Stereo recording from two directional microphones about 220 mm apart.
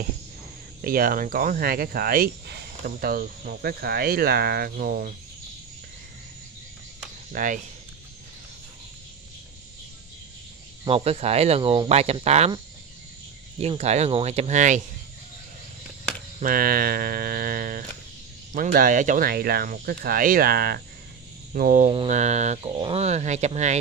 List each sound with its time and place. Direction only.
0.8 s speech: 40° right (ahead or behind)
7.3 s speech: 35° right (ahead or behind)
10.9 s speech: 30° right (ahead or behind)
13.6 s speech: 30° right (ahead or behind)
16.3 s speech: 40° right (ahead or behind)